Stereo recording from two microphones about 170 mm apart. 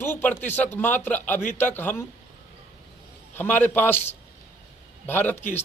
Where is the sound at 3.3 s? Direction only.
10° left (ahead or behind).